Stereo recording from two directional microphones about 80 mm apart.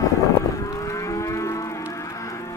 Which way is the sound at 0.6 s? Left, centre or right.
Left.